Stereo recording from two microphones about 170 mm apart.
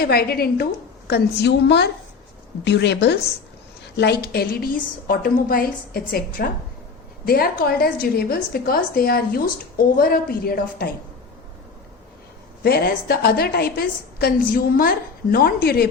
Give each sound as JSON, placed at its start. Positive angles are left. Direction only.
{"t": 0.0, "sound": "a woman's voice", "side_deg": 65}
{"t": 12.6, "sound": "a woman's voice", "side_deg": 65}